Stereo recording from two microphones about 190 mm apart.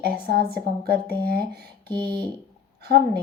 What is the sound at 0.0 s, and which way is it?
Speech, 55° right (ahead or behind).